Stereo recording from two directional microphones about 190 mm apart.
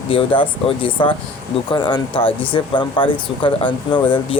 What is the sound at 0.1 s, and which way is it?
Speech, 30° left (ahead or behind).